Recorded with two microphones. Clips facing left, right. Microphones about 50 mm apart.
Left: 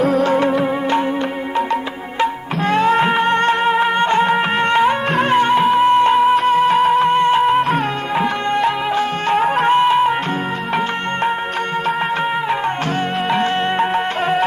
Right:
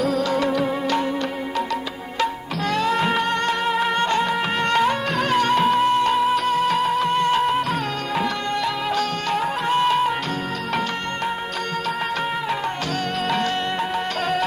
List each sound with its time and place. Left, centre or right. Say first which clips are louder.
0.0 s music: left 6 dB; left
2.2 s music: left 5 dB; left
9.8 s music: left 5 dB; left
13.3 s music: left 7 dB; left